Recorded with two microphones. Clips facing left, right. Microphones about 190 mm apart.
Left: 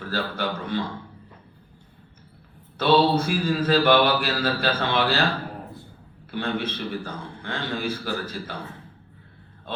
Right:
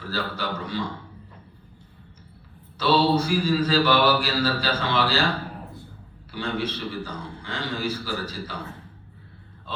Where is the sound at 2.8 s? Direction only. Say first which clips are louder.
Left 1 dB; 55° left (ahead or behind).